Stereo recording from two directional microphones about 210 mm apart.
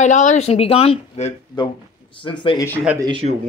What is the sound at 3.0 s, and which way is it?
Speech, 25° right (ahead or behind).